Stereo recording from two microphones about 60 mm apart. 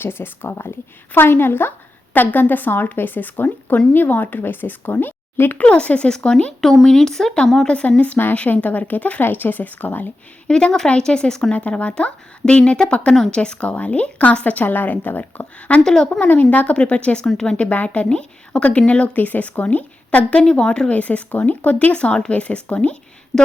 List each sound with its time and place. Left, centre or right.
0.0 s a woman's voice: left
5.6 s a woman's voice: left
7.7 s a woman's voice: left
10.4 s a woman's voice: centre
11.5 s a woman's voice: left
15.8 s a woman's voice: centre
16.2 s speech: left
17.2 s a woman's voice: centre